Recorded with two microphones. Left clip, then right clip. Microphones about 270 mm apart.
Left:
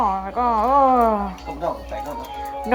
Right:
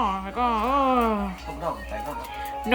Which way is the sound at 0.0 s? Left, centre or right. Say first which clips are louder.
Left 4 dB; centre.